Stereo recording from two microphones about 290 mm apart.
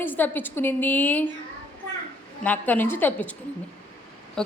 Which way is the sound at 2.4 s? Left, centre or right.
Centre.